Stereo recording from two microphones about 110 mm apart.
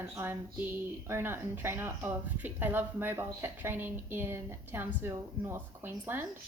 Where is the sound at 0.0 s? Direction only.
25° right (ahead or behind).